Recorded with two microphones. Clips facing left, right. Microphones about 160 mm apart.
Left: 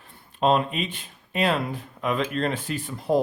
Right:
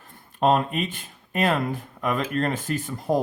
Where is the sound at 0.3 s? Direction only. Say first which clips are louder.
Right 1 dB; 45° right (ahead or behind).